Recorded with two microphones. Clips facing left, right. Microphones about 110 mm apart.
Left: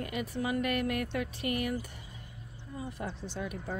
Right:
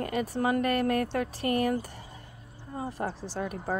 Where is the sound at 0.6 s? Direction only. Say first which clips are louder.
Right 5 dB; 35° right (ahead or behind).